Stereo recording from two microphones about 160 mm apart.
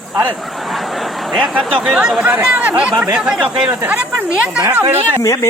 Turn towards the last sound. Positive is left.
turn(degrees=20)  # may be behind; listen again after turning